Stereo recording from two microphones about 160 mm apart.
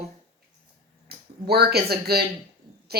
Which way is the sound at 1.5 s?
80° right.